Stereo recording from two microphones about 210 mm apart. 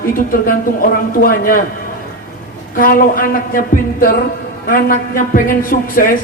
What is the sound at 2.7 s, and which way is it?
A man's voice, 40° left (ahead or behind).